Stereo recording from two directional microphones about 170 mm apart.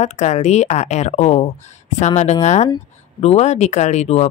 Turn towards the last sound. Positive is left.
turn(degrees=40)  # may be behind; listen again after turning